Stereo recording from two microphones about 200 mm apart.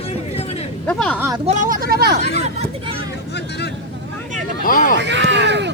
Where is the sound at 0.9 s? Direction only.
Centre (ahead or behind).